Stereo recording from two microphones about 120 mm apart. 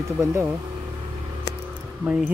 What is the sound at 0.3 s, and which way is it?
Speech, 25° right (ahead or behind).